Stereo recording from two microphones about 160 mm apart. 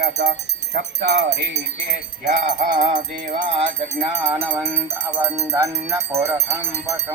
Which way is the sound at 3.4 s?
35° right (ahead or behind).